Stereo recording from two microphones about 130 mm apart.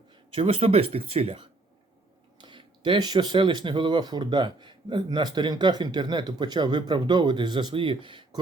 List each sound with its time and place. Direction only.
0.3 s speech: 45° right (ahead or behind)